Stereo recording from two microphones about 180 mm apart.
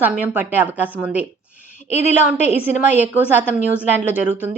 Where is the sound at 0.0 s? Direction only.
10° right (ahead or behind).